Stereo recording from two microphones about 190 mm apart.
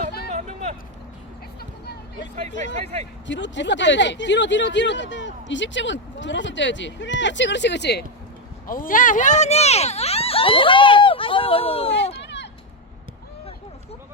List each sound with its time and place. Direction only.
0.3 s vehicle: 35° right (ahead or behind)
2.7 s speech: 35° right (ahead or behind)
3.2 s speech: 75° left (ahead or behind)
8.6 s speech: 45° left (ahead or behind); by 12.1 s 30° left (ahead or behind)
12.2 s a sound: 65° left (ahead or behind)